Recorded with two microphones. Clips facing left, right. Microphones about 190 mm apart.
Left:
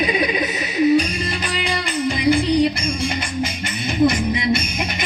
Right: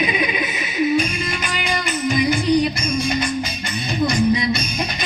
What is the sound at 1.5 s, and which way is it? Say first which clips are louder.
Music: left 1 dB; 30° left (ahead or behind).